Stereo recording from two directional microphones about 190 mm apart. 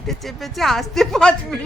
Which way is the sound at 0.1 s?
Centre (ahead or behind).